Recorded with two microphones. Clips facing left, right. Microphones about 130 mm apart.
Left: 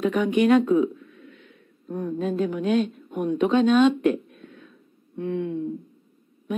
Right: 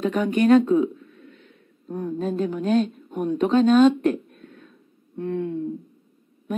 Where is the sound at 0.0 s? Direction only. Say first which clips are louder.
Even; 35° right (ahead or behind).